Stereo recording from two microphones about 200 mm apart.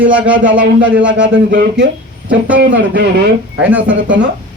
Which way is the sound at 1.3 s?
60° right (ahead or behind).